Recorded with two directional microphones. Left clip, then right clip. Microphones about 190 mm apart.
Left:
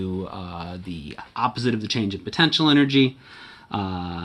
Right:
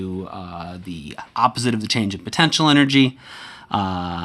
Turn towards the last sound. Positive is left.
turn(degrees=-50)  # may be behind; listen again after turning